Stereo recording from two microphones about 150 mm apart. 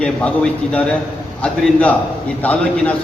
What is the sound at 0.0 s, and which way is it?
A man's voice, 5° left (ahead or behind).